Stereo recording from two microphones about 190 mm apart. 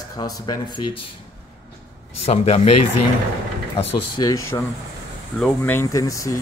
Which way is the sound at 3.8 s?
30° left (ahead or behind).